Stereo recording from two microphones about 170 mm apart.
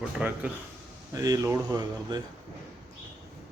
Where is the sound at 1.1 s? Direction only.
20° right (ahead or behind).